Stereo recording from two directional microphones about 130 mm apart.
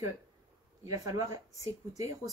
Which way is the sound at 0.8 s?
25° right (ahead or behind).